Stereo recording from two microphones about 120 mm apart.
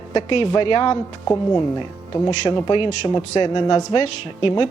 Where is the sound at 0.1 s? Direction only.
50° left (ahead or behind).